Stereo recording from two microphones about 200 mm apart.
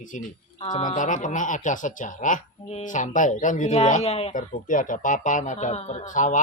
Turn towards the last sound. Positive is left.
turn(degrees=40)  # may be behind; listen again after turning